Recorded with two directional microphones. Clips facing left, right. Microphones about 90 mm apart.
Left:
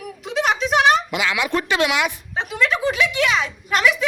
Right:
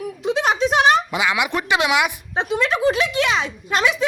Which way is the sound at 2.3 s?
35° right (ahead or behind).